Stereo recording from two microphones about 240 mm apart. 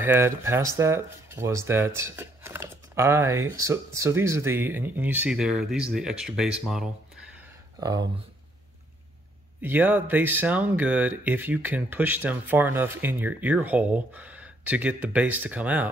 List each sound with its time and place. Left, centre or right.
0.0 s speech: centre
7.8 s speech: centre
9.6 s speech: centre